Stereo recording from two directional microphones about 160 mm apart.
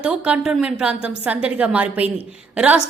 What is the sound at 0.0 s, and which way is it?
A woman's voice, 5° right (ahead or behind).